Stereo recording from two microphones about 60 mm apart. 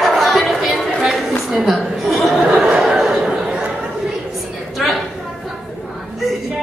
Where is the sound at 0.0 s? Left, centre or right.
Centre.